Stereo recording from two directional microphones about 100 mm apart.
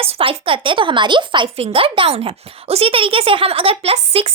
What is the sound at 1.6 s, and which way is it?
A woman's voice, 70° right (ahead or behind).